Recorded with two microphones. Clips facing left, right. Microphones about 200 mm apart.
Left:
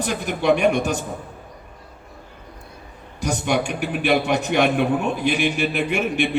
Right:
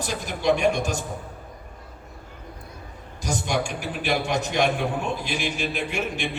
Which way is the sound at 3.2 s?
60° left (ahead or behind).